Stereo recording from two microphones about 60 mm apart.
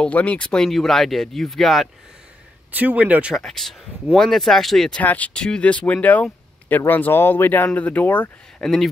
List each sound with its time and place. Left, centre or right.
0.0 s speech: left
0.7 s speech: centre
2.7 s speech: right
3.3 s speech: centre
4.9 s speech: left
5.3 s speech: centre
8.5 s speech: centre